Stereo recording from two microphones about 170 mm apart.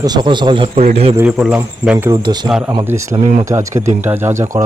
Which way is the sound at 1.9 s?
20° right (ahead or behind).